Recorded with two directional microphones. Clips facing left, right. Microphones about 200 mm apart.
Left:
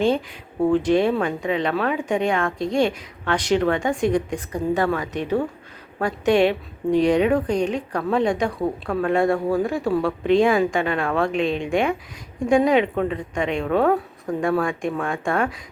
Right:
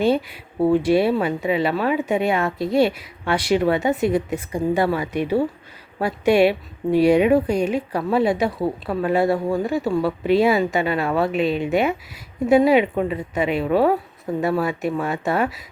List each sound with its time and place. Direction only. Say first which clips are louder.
0.0 s a woman's voice: right 1 dB; 5° right (ahead or behind)